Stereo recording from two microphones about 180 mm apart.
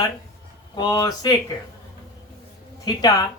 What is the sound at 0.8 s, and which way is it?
Speech, 20° left (ahead or behind).